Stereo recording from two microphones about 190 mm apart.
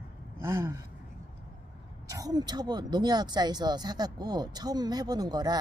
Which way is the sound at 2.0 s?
20° right (ahead or behind).